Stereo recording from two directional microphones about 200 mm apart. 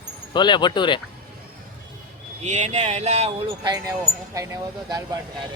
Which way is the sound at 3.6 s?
20° right (ahead or behind).